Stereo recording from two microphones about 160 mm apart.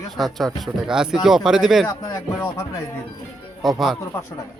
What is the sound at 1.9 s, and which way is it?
Speech, 25° left (ahead or behind).